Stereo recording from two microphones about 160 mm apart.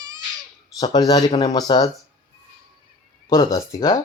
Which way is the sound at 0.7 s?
25° left (ahead or behind).